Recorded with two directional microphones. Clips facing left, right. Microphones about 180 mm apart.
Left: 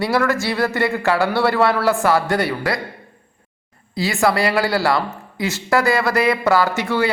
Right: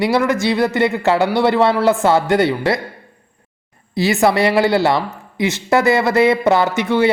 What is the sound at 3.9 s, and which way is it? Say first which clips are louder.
Speech: right 4 dB; 25° right (ahead or behind).